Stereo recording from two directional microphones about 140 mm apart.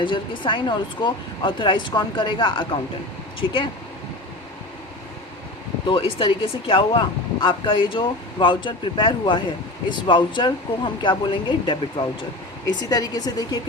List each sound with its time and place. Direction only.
0.0 s speech: 35° left (ahead or behind)
5.8 s speech: 40° left (ahead or behind)